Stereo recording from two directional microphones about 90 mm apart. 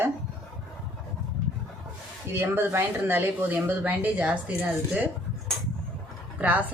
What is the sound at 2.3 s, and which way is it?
Speech, 20° right (ahead or behind).